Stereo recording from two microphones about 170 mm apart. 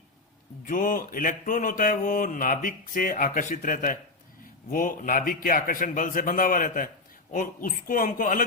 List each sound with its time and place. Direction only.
0.6 s mantra: 50° left (ahead or behind)